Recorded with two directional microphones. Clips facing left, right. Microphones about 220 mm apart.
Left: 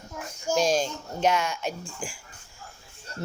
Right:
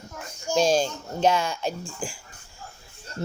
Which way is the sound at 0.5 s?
30° right (ahead or behind).